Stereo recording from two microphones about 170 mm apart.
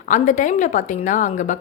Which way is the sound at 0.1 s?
50° left (ahead or behind).